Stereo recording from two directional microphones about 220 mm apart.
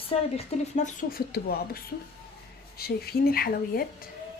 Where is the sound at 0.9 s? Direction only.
40° left (ahead or behind).